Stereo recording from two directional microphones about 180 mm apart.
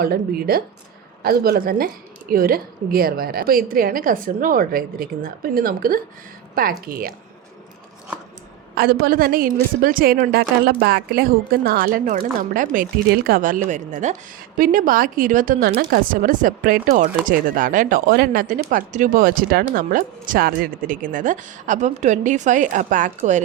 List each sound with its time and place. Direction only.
0.0 s a woman's voice: 55° right (ahead or behind)
8.7 s a woman's voice: 60° right (ahead or behind)